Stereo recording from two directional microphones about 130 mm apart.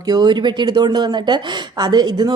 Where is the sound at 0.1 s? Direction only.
35° right (ahead or behind).